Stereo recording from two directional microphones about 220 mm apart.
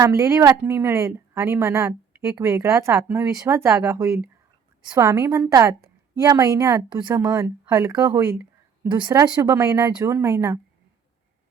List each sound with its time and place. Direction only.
0.0 s a woman's voice: 15° right (ahead or behind)